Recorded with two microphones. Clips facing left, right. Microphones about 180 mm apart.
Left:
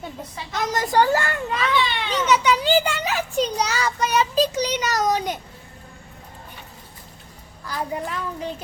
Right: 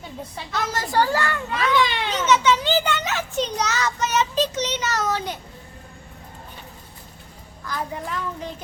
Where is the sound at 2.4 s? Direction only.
10° left (ahead or behind).